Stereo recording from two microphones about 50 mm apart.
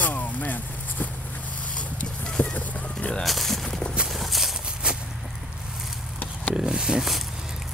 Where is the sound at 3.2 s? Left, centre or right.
Centre.